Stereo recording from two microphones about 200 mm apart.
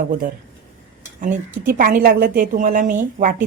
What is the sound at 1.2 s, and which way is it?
A woman's voice, 45° right (ahead or behind).